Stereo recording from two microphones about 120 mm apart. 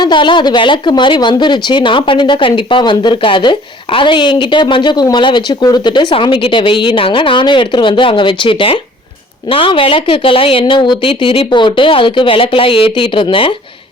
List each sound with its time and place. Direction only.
0.0 s speech: 40° left (ahead or behind)